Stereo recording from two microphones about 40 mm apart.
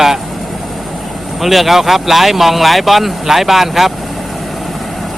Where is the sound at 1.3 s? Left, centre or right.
Centre.